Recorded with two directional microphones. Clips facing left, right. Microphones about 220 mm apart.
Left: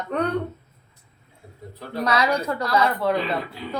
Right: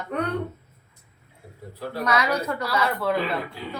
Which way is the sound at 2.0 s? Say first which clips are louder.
Left 2 dB; 30° left (ahead or behind).